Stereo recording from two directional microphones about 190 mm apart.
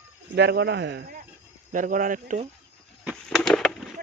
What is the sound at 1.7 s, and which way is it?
Speech, 45° right (ahead or behind).